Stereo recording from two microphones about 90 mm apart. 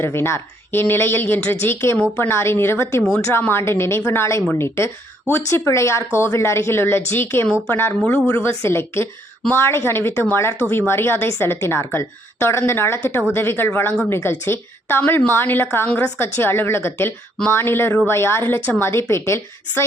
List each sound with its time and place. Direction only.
0.0 s speech: 30° left (ahead or behind)